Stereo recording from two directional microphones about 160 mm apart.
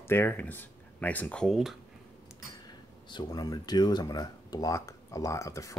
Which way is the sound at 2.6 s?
25° left (ahead or behind).